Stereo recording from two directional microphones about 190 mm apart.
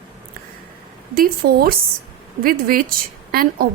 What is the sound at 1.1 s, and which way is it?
A woman's voice, 50° right (ahead or behind).